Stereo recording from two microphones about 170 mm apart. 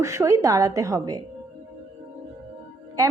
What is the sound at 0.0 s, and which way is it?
A woman's voice, 15° right (ahead or behind).